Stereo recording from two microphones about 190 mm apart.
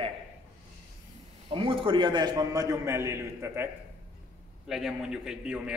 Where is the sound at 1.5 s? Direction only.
25° right (ahead or behind).